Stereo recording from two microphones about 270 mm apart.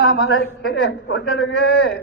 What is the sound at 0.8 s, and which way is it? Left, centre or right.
A man's voice, left.